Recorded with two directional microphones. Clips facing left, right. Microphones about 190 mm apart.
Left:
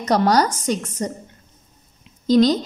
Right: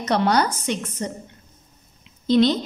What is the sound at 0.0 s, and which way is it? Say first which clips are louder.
A woman's voice: left 3 dB; 40° left (ahead or behind).